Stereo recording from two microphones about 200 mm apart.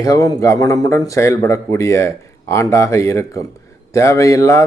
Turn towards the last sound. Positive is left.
turn(degrees=15)  # may be behind; listen again after turning